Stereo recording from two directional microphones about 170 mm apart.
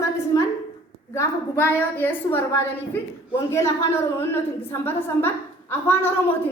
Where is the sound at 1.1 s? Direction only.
15° left (ahead or behind).